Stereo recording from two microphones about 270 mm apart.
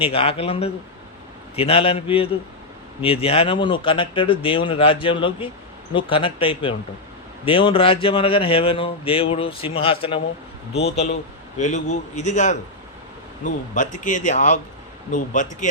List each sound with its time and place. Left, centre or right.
0.0 s speech: left